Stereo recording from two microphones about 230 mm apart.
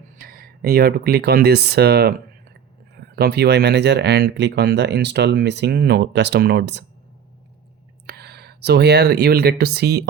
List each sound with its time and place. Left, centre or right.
0.2 s speech: right
3.2 s speech: right
8.0 s speech: right